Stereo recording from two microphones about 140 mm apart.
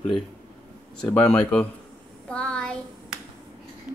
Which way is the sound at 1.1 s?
5° left (ahead or behind).